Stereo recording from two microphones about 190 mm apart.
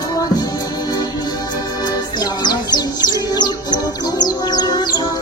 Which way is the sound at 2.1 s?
20° left (ahead or behind).